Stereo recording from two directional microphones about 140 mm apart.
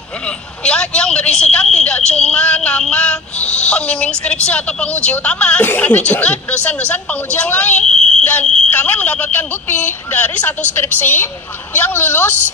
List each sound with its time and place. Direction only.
0.7 s a woman's voice: 5° left (ahead or behind)
7.9 s speech: 40° right (ahead or behind)
8.2 s a woman's voice: 10° left (ahead or behind)